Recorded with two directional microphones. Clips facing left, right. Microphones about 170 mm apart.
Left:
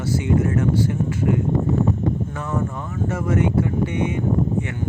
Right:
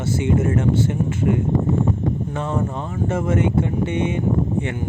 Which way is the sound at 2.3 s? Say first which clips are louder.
Right 2 dB; 25° right (ahead or behind).